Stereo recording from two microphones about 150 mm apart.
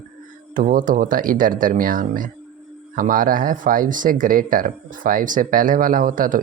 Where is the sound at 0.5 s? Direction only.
65° right (ahead or behind).